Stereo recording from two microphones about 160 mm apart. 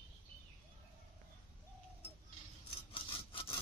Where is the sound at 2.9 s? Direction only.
35° left (ahead or behind).